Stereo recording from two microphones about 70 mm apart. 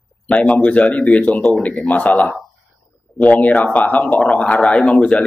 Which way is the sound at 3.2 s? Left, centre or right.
Left.